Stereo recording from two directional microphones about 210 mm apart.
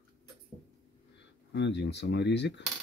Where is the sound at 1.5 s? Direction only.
55° left (ahead or behind).